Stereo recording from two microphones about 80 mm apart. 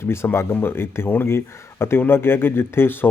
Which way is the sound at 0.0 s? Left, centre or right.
Left.